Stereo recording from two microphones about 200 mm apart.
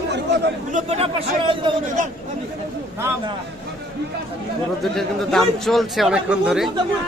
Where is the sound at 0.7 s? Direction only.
30° right (ahead or behind).